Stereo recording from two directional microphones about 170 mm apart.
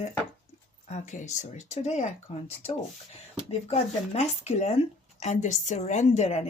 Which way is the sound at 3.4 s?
40° left (ahead or behind).